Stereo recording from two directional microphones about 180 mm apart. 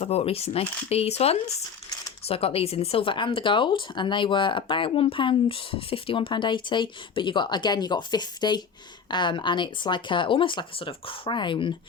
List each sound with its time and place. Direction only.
0.0 s speech: 35° left (ahead or behind)